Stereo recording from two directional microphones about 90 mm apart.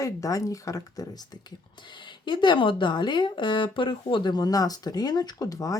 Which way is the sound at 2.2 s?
60° left (ahead or behind).